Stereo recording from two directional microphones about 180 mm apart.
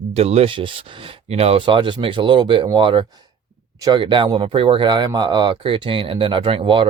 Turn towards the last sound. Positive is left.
turn(degrees=-30)  # may be behind; listen again after turning